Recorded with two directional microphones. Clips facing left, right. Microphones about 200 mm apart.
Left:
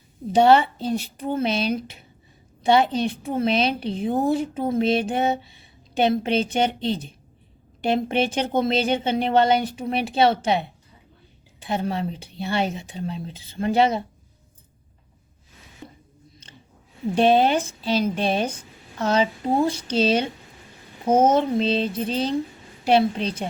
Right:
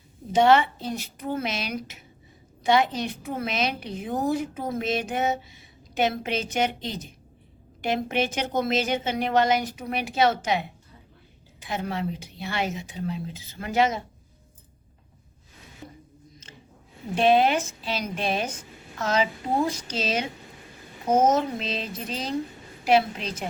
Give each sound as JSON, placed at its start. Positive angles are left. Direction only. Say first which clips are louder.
{"t": 0.3, "sound": "a woman's voice", "louder": "left 3 dB", "side_deg": 35}
{"t": 17.2, "sound": "a woman's voice", "louder": "left 2 dB", "side_deg": 30}